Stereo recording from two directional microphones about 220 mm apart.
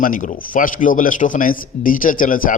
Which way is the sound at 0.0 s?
35° left (ahead or behind).